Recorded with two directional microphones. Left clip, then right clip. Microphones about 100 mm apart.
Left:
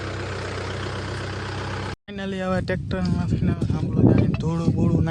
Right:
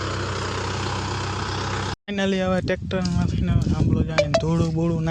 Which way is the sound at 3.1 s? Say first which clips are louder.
Left 1 dB; 10° right (ahead or behind).